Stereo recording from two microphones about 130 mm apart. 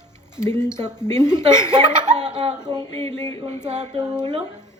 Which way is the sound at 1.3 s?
35° right (ahead or behind).